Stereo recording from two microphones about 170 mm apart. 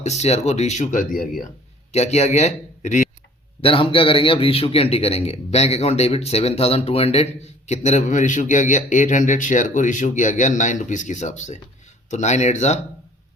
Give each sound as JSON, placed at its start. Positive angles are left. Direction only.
{"t": 0.0, "sound": "a man's voice", "side_deg": 40}
{"t": 1.9, "sound": "a man's voice", "side_deg": 40}
{"t": 3.6, "sound": "a man's voice", "side_deg": 30}